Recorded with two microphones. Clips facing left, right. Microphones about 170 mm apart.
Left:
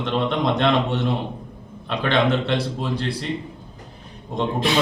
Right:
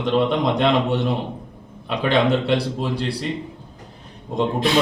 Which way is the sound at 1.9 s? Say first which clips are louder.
Right 2 dB; 10° right (ahead or behind).